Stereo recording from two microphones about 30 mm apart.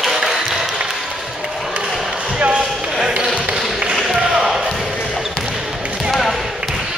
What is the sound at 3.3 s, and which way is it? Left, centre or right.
Tap, right.